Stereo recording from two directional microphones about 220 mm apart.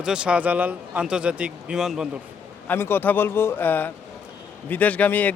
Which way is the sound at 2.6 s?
10° left (ahead or behind).